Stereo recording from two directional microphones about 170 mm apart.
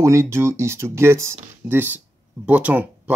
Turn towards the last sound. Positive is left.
turn(degrees=-10)  # may be behind; listen again after turning